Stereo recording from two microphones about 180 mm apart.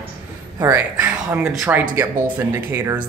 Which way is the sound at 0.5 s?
20° right (ahead or behind).